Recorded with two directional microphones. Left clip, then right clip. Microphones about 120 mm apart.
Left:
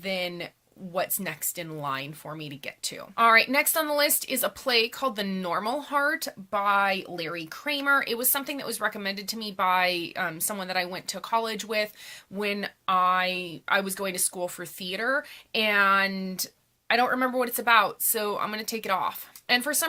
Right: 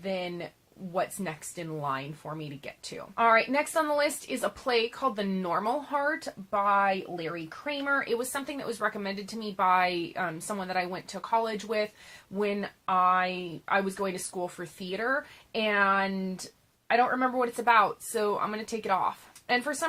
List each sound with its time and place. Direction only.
0.0 s a woman's voice: 20° left (ahead or behind)
17.6 s speech: 10° left (ahead or behind)